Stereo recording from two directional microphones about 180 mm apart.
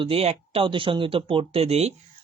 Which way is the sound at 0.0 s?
35° right (ahead or behind).